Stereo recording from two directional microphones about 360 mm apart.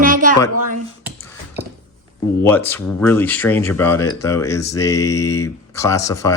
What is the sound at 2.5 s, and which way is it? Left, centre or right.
Speech, centre.